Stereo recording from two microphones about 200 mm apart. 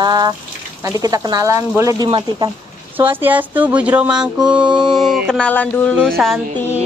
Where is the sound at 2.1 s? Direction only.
25° right (ahead or behind).